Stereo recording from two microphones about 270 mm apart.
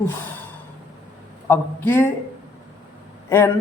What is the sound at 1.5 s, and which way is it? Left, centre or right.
Speech, centre.